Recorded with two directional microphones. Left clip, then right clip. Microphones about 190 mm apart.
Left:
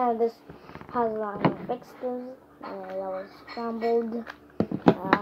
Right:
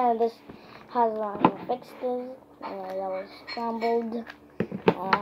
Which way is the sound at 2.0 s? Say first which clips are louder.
Right 3 dB; 35° right (ahead or behind).